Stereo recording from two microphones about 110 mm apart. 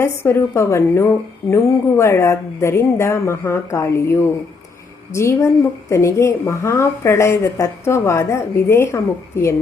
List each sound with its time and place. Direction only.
0.0 s a woman's voice: 20° left (ahead or behind)